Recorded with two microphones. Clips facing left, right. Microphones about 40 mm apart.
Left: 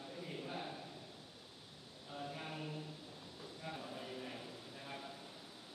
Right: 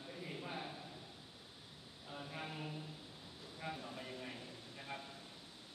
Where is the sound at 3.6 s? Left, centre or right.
Centre.